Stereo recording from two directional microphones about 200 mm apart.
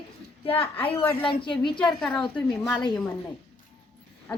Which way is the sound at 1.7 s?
5° left (ahead or behind).